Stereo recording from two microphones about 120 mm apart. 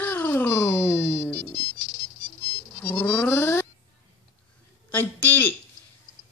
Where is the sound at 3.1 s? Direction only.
15° left (ahead or behind).